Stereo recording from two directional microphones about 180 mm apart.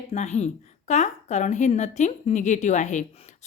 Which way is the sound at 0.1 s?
40° left (ahead or behind).